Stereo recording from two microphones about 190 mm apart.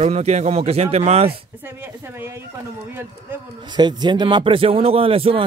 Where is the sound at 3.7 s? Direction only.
20° right (ahead or behind).